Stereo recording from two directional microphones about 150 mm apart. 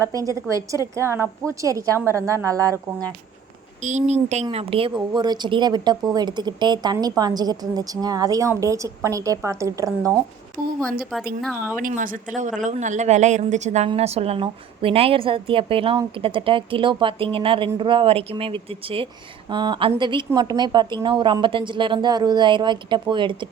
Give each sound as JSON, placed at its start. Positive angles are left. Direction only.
{"t": 0.0, "sound": "speech", "side_deg": -20}
{"t": 3.8, "sound": "a woman's voice", "side_deg": -50}
{"t": 4.5, "sound": "speech", "side_deg": -35}
{"t": 11.8, "sound": "a woman's voice", "side_deg": -65}